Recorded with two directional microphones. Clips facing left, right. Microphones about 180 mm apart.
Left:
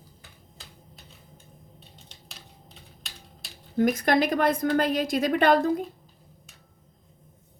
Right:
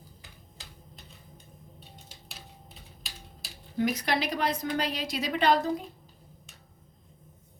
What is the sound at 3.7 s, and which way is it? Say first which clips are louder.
A woman's voice: left 6 dB; 50° left (ahead or behind).